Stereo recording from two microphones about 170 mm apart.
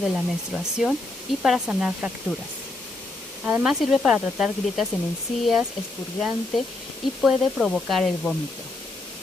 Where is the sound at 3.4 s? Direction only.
5° right (ahead or behind).